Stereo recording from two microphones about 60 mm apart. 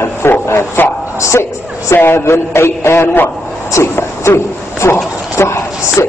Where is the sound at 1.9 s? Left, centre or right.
Left.